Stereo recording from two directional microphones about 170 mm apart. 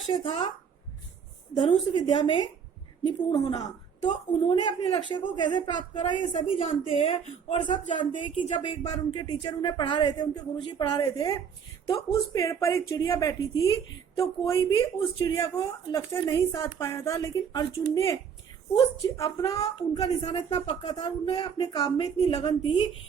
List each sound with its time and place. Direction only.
0.1 s a woman's voice: 30° left (ahead or behind)
1.5 s a woman's voice: 30° left (ahead or behind)
20.5 s a woman's voice: 35° left (ahead or behind)
22.3 s a woman's voice: 35° left (ahead or behind)